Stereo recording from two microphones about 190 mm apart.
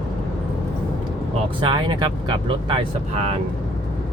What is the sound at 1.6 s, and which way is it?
Speech, 25° right (ahead or behind).